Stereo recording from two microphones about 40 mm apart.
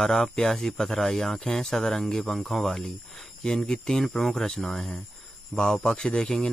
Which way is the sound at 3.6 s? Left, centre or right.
Centre.